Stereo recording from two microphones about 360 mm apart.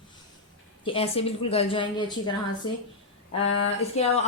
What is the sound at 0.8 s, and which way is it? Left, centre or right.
A woman's voice, centre.